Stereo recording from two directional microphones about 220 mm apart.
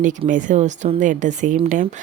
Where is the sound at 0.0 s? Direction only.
35° right (ahead or behind).